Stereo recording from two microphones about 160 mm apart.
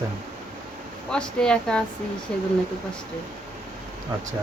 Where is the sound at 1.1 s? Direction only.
5° left (ahead or behind).